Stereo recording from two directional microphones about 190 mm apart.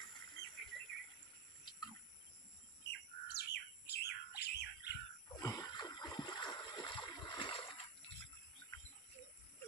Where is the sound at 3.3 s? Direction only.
60° left (ahead or behind).